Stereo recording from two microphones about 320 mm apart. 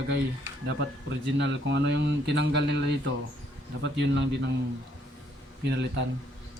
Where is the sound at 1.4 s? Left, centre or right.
Right.